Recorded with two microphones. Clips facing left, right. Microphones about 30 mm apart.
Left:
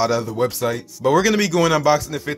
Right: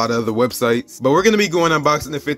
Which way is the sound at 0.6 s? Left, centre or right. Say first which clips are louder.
Right 6 dB; right.